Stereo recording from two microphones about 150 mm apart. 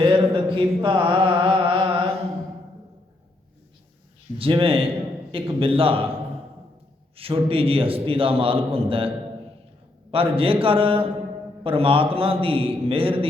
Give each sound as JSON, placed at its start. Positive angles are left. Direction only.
{"t": 0.0, "sound": "mantra", "side_deg": -35}
{"t": 4.4, "sound": "a man's voice", "side_deg": -35}
{"t": 7.2, "sound": "a man's voice", "side_deg": -40}